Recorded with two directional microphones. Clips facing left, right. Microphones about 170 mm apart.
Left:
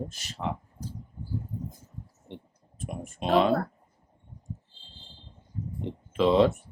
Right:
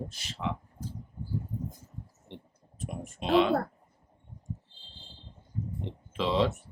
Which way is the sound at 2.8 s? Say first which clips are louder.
Left 3 dB; 50° left (ahead or behind).